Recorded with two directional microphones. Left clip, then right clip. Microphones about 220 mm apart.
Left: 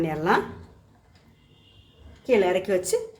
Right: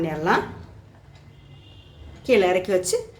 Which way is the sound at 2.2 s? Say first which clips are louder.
Right 2 dB; centre (ahead or behind).